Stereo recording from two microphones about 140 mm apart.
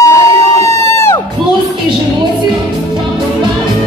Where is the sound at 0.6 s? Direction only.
20° left (ahead or behind).